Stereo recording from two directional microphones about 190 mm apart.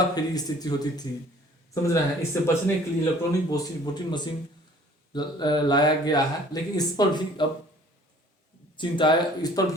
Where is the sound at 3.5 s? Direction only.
20° left (ahead or behind).